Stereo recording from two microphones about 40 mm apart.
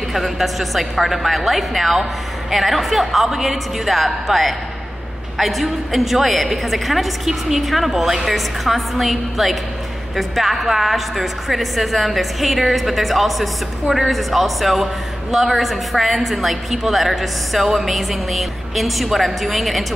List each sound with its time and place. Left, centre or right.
0.1 s a woman's voice: centre